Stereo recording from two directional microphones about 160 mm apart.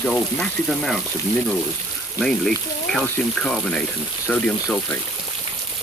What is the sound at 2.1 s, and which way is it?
Speech, 5° left (ahead or behind).